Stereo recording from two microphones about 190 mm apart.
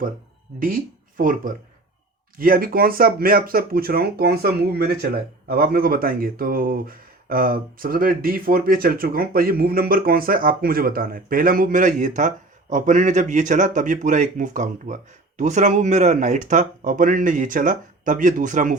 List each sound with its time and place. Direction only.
0.6 s speech: 45° right (ahead or behind)